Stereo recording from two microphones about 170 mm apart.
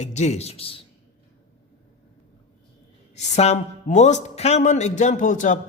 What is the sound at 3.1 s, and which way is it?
Speech, 40° left (ahead or behind).